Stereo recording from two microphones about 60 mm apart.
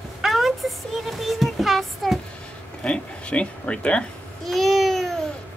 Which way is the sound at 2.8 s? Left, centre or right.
Centre.